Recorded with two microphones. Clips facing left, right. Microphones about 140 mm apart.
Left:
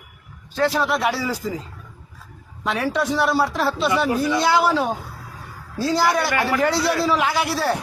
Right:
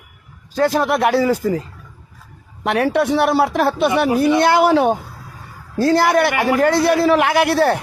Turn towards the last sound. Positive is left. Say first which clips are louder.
# right 7 dB
turn(degrees=-60)  # may be behind; listen again after turning